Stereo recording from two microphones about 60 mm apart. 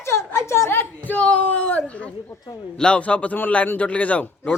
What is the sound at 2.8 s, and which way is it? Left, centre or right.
A man's voice, centre.